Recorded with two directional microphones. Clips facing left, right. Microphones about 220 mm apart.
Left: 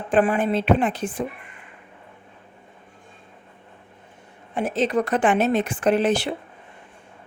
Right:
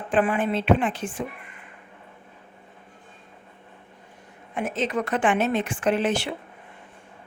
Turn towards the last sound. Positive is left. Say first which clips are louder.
# left 3 dB
turn(degrees=35)  # may be behind; listen again after turning